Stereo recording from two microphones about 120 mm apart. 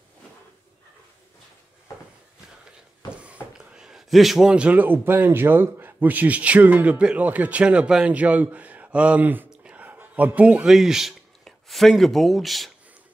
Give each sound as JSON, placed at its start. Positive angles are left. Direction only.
{"t": 3.5, "sound": "a man's voice", "side_deg": -5}